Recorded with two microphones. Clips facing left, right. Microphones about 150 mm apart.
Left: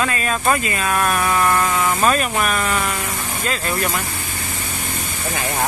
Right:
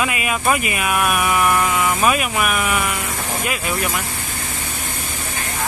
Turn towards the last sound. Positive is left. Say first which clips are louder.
# left 1 dB
turn(degrees=-10)  # may be behind; listen again after turning